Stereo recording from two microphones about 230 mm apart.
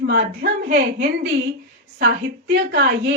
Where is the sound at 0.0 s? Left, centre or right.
Right.